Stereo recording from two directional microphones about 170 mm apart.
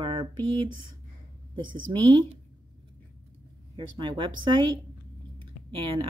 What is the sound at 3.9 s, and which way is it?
Speech, 30° right (ahead or behind).